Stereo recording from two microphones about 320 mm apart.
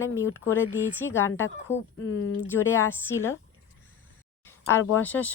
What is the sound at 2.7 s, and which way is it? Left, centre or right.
Speech, centre.